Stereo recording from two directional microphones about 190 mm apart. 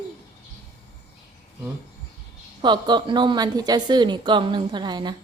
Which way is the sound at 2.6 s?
25° right (ahead or behind).